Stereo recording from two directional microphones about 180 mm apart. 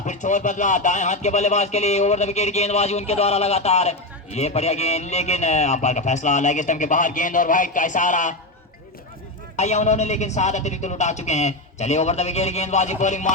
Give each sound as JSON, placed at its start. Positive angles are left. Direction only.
{"t": 0.0, "sound": "speech", "side_deg": 45}
{"t": 9.6, "sound": "speech", "side_deg": 40}